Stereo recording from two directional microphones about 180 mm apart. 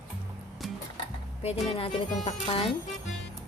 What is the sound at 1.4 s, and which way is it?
Speech, 35° left (ahead or behind).